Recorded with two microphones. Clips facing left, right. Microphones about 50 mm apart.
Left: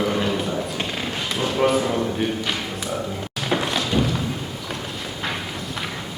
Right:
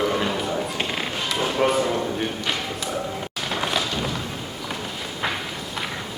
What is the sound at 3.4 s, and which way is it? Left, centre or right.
Music, centre.